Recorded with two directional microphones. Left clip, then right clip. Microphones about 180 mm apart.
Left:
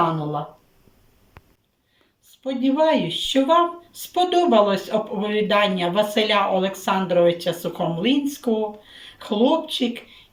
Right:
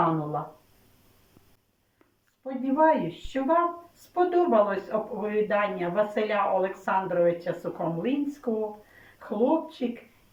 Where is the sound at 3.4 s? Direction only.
15° left (ahead or behind).